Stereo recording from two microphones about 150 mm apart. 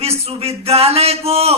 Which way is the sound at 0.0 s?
40° right (ahead or behind).